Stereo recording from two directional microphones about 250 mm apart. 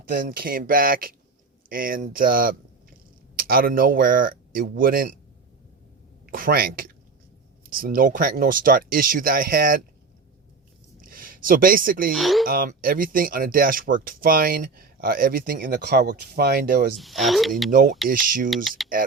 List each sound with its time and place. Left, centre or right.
0.3 s speech: right
6.3 s speech: right
11.0 s a sound: right
12.1 s speech: centre
12.5 s speech: right
17.0 s speech: centre
17.7 s speech: right